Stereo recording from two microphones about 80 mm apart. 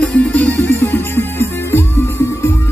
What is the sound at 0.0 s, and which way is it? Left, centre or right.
Music, centre.